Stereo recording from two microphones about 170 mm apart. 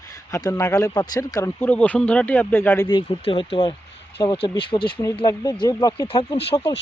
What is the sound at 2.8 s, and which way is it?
Speech, 30° left (ahead or behind).